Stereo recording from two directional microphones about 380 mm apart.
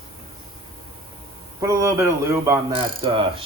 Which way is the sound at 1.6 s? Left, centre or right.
Centre.